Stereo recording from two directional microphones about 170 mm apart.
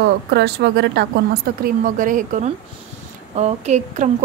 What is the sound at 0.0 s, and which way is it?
A woman's voice, 80° right.